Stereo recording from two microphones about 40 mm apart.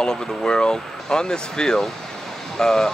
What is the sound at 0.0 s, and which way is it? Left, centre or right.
Speech, left.